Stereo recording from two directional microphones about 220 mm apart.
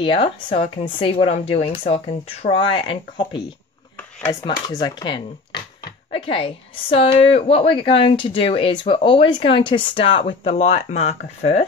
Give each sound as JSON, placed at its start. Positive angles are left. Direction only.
{"t": 0.0, "sound": "a woman's voice", "side_deg": 25}